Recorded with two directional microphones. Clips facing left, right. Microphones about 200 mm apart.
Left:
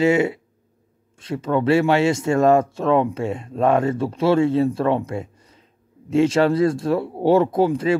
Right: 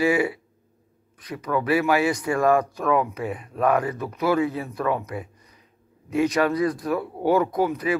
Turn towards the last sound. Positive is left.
turn(degrees=30)  # may be behind; listen again after turning